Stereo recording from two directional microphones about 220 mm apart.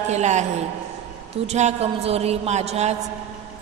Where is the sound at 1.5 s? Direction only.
30° right (ahead or behind).